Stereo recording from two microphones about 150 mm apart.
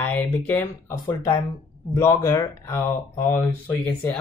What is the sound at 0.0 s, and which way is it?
Speech, 10° left (ahead or behind).